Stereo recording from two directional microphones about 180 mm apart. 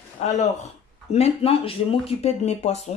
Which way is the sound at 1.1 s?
35° left (ahead or behind).